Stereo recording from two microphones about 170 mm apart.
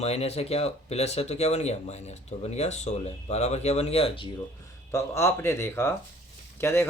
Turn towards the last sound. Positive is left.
turn(degrees=15)  # may be behind; listen again after turning